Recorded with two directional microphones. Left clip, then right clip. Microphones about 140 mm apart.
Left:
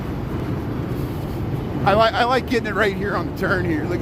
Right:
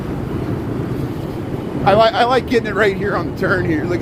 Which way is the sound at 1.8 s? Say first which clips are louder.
Right 4 dB; 45° left (ahead or behind).